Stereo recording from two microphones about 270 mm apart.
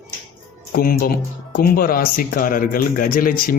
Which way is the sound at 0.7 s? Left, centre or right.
Left.